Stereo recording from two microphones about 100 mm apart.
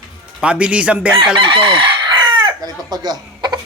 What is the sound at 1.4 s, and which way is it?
Chicken, 55° right (ahead or behind).